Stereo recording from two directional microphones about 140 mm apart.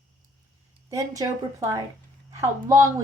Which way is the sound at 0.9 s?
25° right (ahead or behind).